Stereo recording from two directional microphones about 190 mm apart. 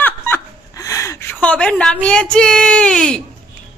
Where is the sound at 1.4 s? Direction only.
5° left (ahead or behind).